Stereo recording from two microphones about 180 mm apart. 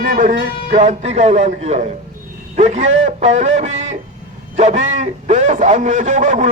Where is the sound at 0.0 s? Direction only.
45° right (ahead or behind).